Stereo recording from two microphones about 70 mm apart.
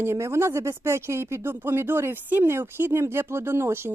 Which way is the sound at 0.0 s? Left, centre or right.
Right.